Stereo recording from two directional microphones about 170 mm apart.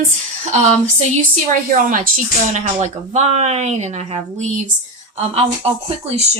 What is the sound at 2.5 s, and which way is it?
Speech, 40° right (ahead or behind).